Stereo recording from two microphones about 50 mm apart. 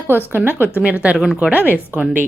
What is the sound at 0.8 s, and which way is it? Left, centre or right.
A woman's voice, right.